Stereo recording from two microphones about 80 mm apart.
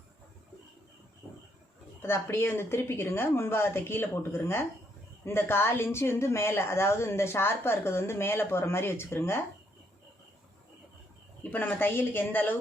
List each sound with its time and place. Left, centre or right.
2.0 s speech: left
11.5 s speech: left